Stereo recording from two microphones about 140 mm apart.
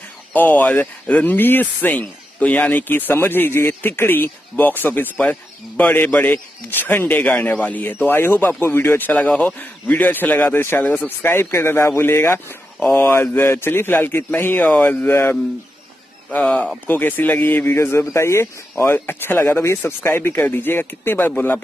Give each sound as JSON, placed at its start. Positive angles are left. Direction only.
{"t": 0.3, "sound": "speech", "side_deg": 15}